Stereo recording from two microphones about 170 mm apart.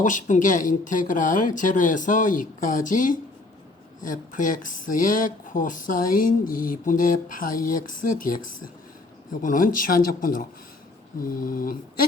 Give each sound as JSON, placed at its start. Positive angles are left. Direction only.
{"t": 0.0, "sound": "speech", "side_deg": 50}